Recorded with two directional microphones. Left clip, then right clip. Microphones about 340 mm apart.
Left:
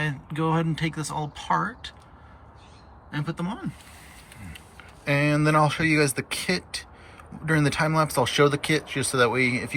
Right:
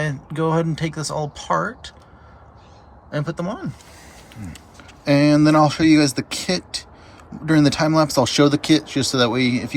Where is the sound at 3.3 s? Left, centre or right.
Centre.